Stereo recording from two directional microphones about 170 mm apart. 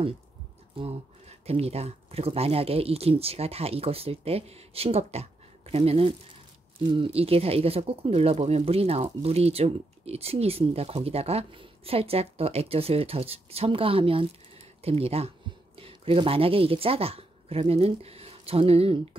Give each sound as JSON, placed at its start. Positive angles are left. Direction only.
{"t": 1.4, "sound": "speech", "side_deg": -35}